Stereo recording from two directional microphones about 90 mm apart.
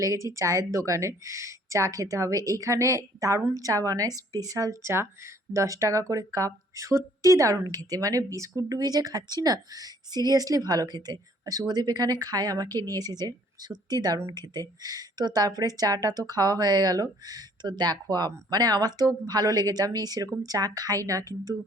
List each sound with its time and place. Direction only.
0.0 s speech: 35° right (ahead or behind)